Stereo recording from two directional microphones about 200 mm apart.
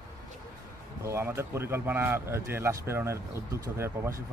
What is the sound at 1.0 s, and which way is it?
A man's voice, 15° right (ahead or behind).